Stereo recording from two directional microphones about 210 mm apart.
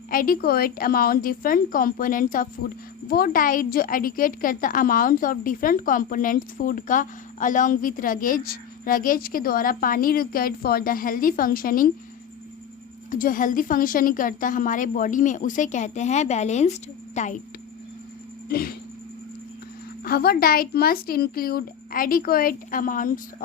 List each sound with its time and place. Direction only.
0.1 s a woman's voice: 45° left (ahead or behind)
13.1 s a woman's voice: 40° left (ahead or behind)
18.4 s a sound: 45° left (ahead or behind)
20.1 s speech: 45° left (ahead or behind)